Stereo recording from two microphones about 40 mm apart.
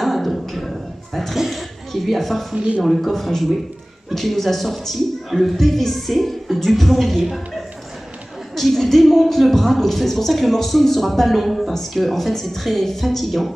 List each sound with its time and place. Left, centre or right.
0.0 s a sound: centre
1.4 s a woman's voice: centre
2.5 s speech: right
2.8 s speech: centre
8.5 s speech: centre